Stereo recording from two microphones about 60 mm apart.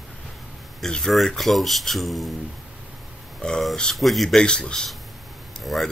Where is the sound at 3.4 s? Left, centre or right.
Centre.